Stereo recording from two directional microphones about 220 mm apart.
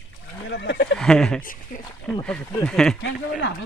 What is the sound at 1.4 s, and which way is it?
Speech, 40° left (ahead or behind).